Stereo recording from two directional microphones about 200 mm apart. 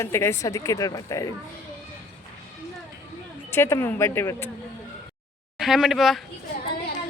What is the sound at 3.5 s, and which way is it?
Speech, 10° left (ahead or behind).